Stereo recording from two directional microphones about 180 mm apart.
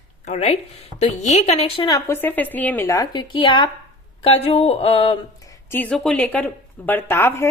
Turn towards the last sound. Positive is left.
turn(degrees=15)  # may be behind; listen again after turning